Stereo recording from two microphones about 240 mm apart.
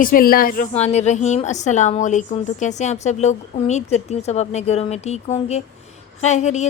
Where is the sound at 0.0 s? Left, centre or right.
Left.